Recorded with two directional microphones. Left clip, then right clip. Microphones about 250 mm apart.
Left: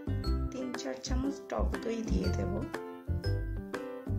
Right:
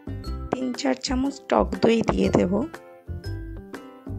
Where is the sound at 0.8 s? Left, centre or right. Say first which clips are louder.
Right 13 dB; right.